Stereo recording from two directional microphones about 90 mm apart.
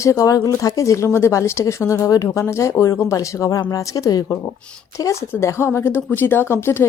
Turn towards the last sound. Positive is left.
turn(degrees=25)  # may be behind; listen again after turning